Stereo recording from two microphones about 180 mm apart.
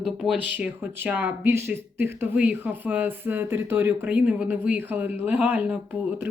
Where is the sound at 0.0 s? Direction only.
5° right (ahead or behind).